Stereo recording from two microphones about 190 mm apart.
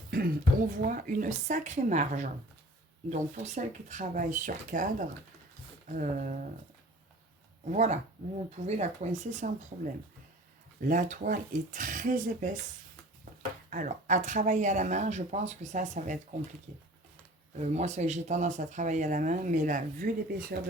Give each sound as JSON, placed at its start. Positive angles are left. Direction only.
{"t": 0.1, "sound": "speech", "side_deg": -50}
{"t": 7.7, "sound": "speech", "side_deg": -40}
{"t": 13.7, "sound": "speech", "side_deg": -40}